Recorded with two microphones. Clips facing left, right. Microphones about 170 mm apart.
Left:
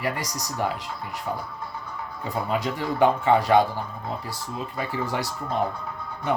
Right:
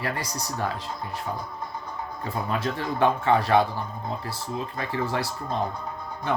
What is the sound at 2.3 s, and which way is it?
Speech, 15° left (ahead or behind).